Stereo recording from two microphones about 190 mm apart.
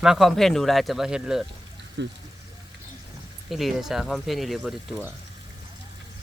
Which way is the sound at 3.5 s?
Centre (ahead or behind).